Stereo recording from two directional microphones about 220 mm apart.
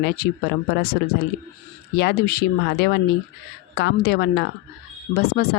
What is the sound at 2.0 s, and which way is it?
Speech, 45° left (ahead or behind).